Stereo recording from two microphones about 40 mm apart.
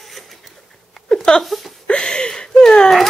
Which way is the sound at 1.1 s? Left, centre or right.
Centre.